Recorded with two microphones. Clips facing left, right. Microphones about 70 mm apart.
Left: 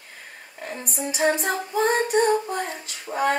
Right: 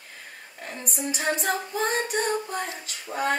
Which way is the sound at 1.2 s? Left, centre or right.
Left.